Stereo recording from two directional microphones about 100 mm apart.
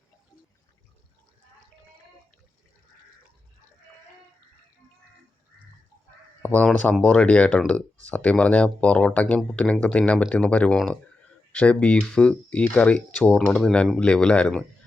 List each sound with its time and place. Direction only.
6.4 s a sound: 15° left (ahead or behind)
7.0 s speech: 10° left (ahead or behind)
13.5 s speech: 5° left (ahead or behind)